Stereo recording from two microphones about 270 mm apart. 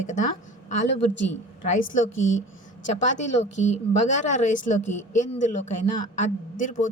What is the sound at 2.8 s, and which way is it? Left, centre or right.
Speech, left.